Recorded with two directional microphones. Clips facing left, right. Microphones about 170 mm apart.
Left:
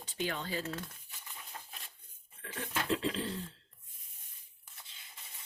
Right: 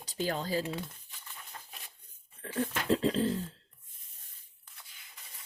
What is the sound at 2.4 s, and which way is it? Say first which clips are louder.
Speech: right 6 dB; 35° right (ahead or behind).